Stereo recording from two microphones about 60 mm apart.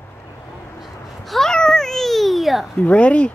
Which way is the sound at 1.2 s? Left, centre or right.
Centre.